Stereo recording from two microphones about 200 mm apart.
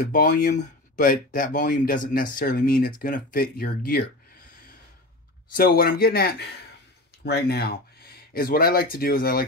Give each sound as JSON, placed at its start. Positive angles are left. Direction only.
{"t": 0.1, "sound": "speech", "side_deg": 40}
{"t": 5.6, "sound": "speech", "side_deg": 50}